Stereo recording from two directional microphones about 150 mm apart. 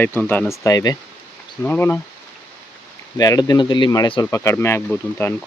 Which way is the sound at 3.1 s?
25° left (ahead or behind).